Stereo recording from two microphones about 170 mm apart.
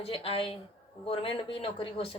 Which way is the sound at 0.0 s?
35° left (ahead or behind).